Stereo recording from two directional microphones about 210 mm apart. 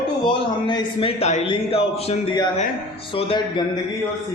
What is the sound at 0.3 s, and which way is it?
A man's voice, 20° left (ahead or behind).